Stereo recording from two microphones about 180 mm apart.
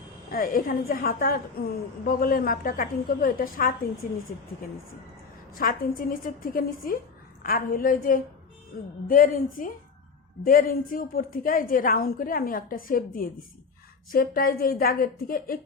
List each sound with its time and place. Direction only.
0.3 s a woman's voice: 50° left (ahead or behind)
5.5 s a woman's voice: 50° left (ahead or behind)